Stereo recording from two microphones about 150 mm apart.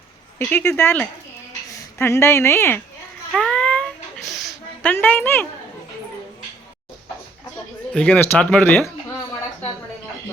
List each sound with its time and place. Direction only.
0.3 s speech: 15° left (ahead or behind)
3.3 s cat: 5° left (ahead or behind)
4.8 s speech: 10° left (ahead or behind)
7.9 s speech: 10° left (ahead or behind)